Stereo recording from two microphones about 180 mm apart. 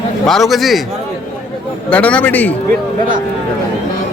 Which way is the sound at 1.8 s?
10° left (ahead or behind).